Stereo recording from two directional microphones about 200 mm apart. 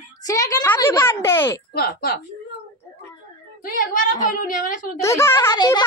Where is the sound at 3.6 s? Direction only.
45° left (ahead or behind).